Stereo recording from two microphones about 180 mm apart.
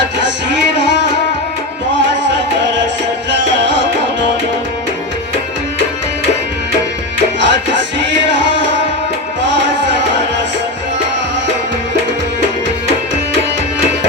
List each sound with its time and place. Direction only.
3.4 s music: 80° right
7.3 s music: 85° right